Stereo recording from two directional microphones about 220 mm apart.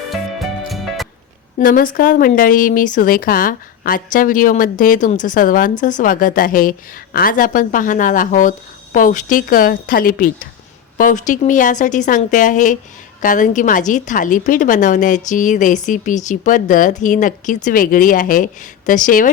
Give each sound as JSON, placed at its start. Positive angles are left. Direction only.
{"t": 0.1, "sound": "music", "side_deg": 0}
{"t": 1.5, "sound": "a woman's voice", "side_deg": 40}